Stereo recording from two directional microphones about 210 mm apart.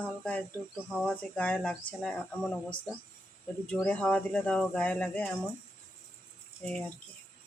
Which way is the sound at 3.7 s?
5° left (ahead or behind).